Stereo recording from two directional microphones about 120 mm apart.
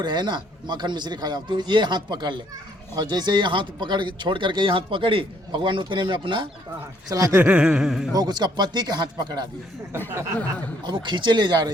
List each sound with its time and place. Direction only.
0.0 s speech: 40° right (ahead or behind)
7.1 s speech: 30° right (ahead or behind)
7.3 s a sound: 10° right (ahead or behind)
8.1 s speech: 35° right (ahead or behind)
10.8 s speech: 40° right (ahead or behind)